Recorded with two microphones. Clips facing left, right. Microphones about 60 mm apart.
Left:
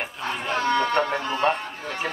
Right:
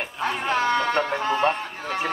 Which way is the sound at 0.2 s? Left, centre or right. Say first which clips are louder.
Right 5 dB; centre.